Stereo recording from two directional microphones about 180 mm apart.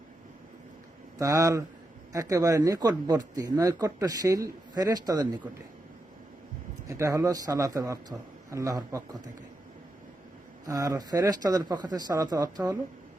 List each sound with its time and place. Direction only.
1.2 s speech: 20° right (ahead or behind)
6.8 s a man's voice: 15° right (ahead or behind)
10.7 s speech: 20° right (ahead or behind)